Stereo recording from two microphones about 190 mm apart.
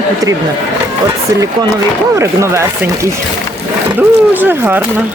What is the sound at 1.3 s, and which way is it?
Speech, 15° right (ahead or behind).